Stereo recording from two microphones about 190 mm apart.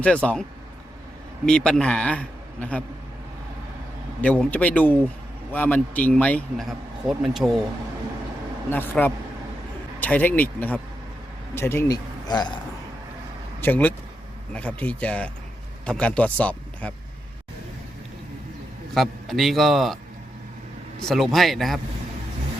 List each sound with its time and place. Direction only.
0.0 s a man's voice: 5° left (ahead or behind)
1.5 s a man's voice: 5° left (ahead or behind)
4.2 s a man's voice: 5° left (ahead or behind)
8.7 s a man's voice: 10° left (ahead or behind)
13.6 s a man's voice: 10° left (ahead or behind)
18.9 s a man's voice: centre (ahead or behind)
21.0 s a man's voice: centre (ahead or behind)